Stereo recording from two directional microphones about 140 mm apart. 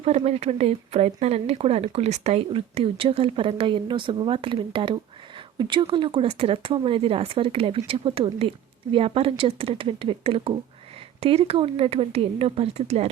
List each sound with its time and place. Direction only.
0.3 s speech: 50° right (ahead or behind)